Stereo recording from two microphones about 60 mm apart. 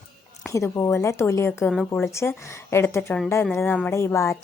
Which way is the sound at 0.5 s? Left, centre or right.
Left.